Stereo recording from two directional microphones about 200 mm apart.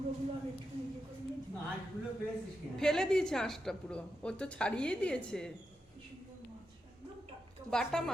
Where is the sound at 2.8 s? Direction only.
Centre (ahead or behind).